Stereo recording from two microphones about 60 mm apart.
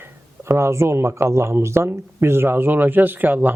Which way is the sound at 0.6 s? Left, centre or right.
Right.